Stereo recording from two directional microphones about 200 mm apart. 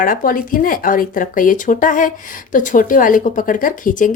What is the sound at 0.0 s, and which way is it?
Speech, 45° left (ahead or behind).